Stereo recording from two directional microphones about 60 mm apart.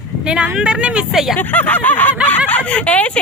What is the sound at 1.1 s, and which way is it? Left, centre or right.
Speech, centre.